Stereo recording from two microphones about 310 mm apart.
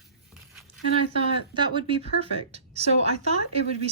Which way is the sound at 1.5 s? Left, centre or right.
Centre.